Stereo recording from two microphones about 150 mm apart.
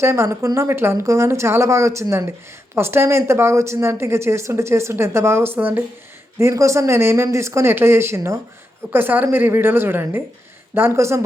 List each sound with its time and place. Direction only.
0.0 s speech: 20° right (ahead or behind)